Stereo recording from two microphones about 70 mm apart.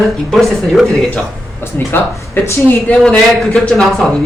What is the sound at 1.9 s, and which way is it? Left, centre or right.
Speech, left.